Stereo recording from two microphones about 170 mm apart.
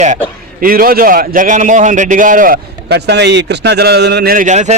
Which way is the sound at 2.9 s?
80° right.